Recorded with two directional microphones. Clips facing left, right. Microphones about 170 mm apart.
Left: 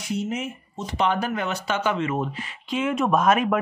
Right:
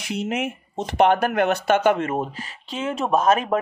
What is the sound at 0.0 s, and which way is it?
Speech, 75° right (ahead or behind).